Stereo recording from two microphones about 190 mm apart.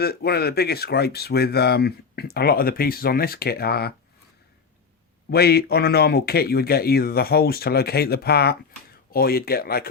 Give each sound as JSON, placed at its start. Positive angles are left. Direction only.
{"t": 0.0, "sound": "speech", "side_deg": 55}
{"t": 5.3, "sound": "speech", "side_deg": 55}